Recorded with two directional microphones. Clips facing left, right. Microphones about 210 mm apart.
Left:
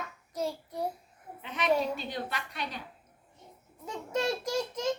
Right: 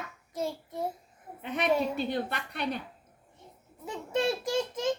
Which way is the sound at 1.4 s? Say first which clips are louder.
Right 1 dB; 55° right (ahead or behind).